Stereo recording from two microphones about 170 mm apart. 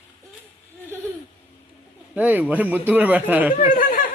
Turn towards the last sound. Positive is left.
turn(degrees=50)  # may be behind; listen again after turning